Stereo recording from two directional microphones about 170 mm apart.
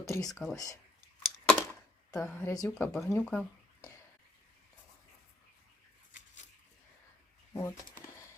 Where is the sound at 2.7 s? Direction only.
5° left (ahead or behind).